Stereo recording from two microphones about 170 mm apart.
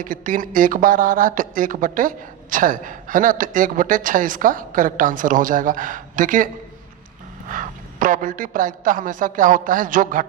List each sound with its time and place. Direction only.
0.0 s speech: 55° right (ahead or behind)